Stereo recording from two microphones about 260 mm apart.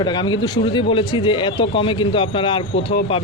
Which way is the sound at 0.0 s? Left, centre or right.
Centre.